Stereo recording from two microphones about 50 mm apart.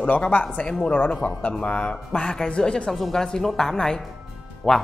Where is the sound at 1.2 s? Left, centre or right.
Left.